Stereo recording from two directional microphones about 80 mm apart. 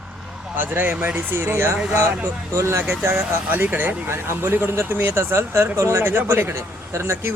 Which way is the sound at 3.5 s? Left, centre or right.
Right.